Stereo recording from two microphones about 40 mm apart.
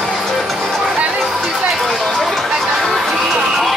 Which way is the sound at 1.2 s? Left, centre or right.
Centre.